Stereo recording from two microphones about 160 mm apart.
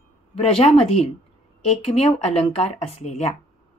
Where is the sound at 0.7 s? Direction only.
40° left (ahead or behind).